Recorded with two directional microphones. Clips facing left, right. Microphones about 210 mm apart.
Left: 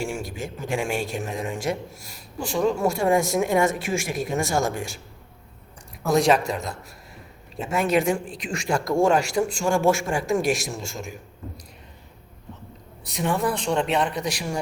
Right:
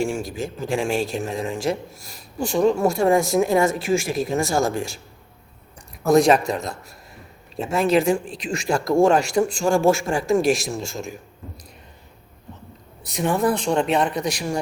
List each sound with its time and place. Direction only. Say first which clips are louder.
0.3 s speech: right 3 dB; 35° right (ahead or behind)
6.1 s speech: right 4 dB; 45° right (ahead or behind)
7.7 s speech: right 3 dB; 35° right (ahead or behind)
13.1 s speech: right 4 dB; 45° right (ahead or behind)